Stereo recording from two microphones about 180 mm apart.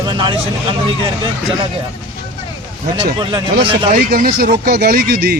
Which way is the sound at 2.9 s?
25° right (ahead or behind).